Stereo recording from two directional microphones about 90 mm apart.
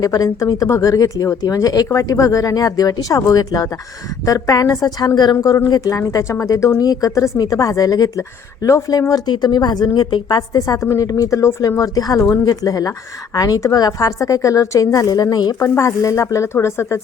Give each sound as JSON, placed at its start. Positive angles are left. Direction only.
{"t": 0.0, "sound": "a woman's voice", "side_deg": 40}
{"t": 5.4, "sound": "a woman's voice", "side_deg": 40}
{"t": 15.5, "sound": "a woman's voice", "side_deg": 30}